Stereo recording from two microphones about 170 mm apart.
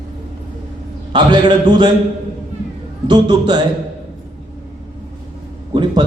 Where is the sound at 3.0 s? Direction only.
25° right (ahead or behind).